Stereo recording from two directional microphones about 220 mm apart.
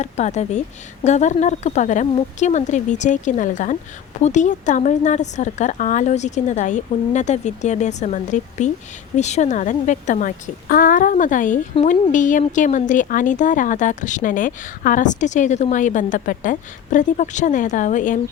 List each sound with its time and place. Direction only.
0.0 s speech: 30° left (ahead or behind)